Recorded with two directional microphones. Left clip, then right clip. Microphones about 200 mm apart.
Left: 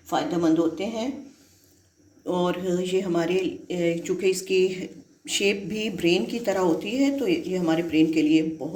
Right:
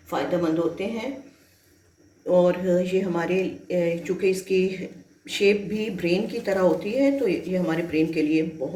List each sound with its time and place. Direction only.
0.1 s speech: 50° left (ahead or behind)
2.2 s speech: 45° left (ahead or behind)